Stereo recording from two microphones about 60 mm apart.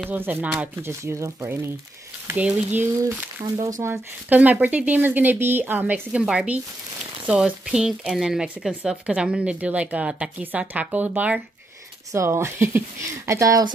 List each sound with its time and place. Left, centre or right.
0.1 s a woman's voice: right
0.8 s speech: right
2.3 s a woman's voice: right
3.5 s speech: right
4.3 s a woman's voice: right
6.1 s a woman's voice: centre
12.1 s speech: right
13.3 s speech: right